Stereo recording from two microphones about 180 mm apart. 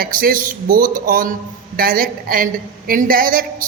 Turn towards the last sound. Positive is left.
turn(degrees=-50)  # may be behind; listen again after turning